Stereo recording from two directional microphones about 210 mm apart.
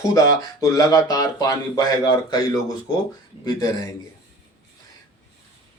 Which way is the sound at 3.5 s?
20° left (ahead or behind).